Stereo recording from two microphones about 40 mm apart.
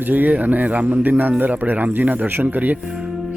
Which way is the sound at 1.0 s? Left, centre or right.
Right.